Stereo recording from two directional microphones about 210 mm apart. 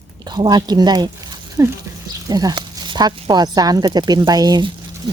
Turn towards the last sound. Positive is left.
turn(degrees=-20)  # may be behind; listen again after turning